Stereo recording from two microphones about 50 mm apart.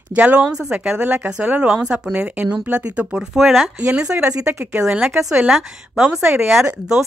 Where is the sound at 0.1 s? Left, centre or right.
Right.